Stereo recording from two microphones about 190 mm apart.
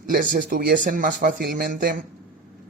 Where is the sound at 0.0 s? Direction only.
45° right (ahead or behind).